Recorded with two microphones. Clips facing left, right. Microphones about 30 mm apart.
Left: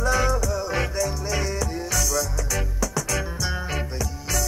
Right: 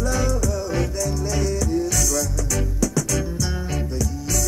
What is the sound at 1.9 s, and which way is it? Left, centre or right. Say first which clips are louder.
Music: right 2 dB; centre.